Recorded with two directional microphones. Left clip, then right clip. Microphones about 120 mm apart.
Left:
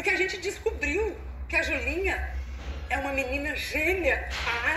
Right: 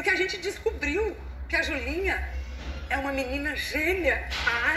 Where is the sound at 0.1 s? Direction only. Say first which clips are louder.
Right 1 dB; 30° left (ahead or behind).